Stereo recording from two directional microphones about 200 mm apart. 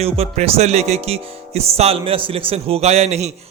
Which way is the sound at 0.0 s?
30° right (ahead or behind).